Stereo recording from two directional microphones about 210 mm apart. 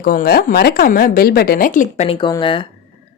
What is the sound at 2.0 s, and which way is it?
Speech, 25° left (ahead or behind).